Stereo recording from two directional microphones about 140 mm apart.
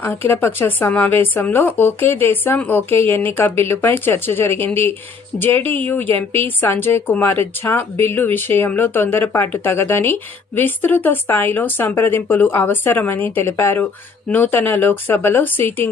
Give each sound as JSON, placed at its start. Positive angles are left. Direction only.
{"t": 0.0, "sound": "speech", "side_deg": 15}